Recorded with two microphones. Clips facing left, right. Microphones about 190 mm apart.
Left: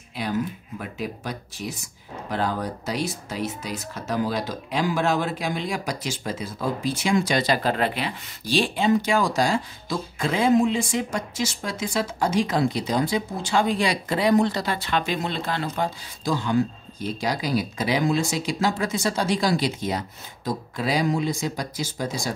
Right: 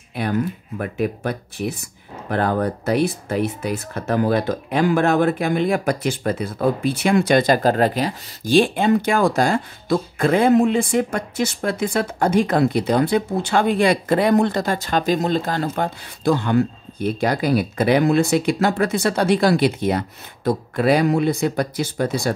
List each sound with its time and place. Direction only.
0.1 s speech: 60° right (ahead or behind)